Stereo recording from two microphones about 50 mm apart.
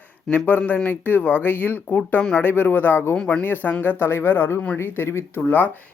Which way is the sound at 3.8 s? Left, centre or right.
Left.